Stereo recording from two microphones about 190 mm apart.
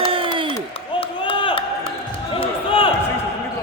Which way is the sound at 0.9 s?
30° left (ahead or behind).